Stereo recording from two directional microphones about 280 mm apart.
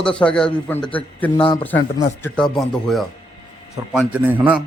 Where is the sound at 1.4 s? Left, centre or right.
Centre.